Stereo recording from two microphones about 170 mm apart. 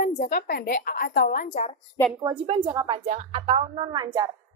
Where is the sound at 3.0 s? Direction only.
40° right (ahead or behind).